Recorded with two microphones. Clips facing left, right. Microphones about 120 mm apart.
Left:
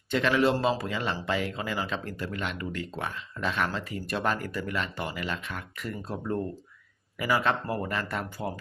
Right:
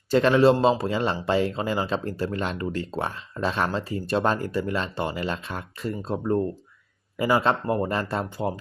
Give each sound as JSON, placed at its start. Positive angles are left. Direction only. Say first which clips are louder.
{"t": 0.1, "sound": "speech", "louder": "right 6 dB", "side_deg": -35}